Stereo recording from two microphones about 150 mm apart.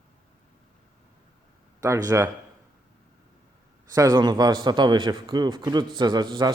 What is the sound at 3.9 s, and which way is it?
A man's voice, 25° right (ahead or behind).